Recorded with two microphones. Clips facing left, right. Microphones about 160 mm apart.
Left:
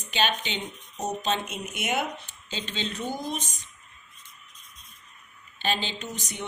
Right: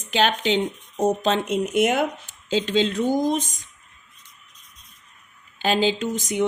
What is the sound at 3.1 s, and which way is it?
Speech, 40° right (ahead or behind).